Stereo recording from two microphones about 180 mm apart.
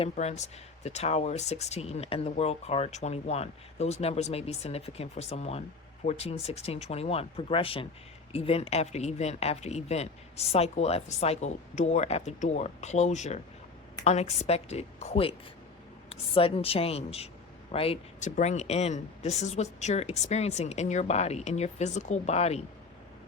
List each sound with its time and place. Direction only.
0.0 s speech: 40° left (ahead or behind)
18.3 s speech: 40° left (ahead or behind)